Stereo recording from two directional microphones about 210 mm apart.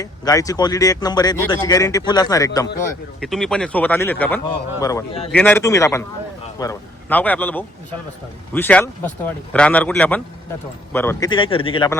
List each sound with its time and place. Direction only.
0.0 s a man's voice: 15° left (ahead or behind)
3.2 s a man's voice: centre (ahead or behind); by 11.9 s 25° left (ahead or behind)